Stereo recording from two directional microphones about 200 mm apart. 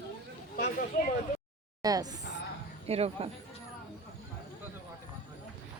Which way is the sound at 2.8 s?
30° right (ahead or behind).